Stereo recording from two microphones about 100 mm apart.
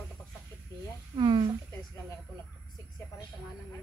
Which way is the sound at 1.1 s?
50° right (ahead or behind).